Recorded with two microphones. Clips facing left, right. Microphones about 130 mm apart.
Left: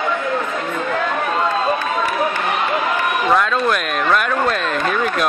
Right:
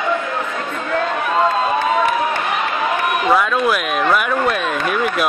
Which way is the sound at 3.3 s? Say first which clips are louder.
Right 1 dB; 5° right (ahead or behind).